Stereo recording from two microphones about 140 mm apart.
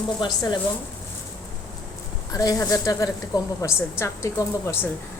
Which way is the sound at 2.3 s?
25° left (ahead or behind).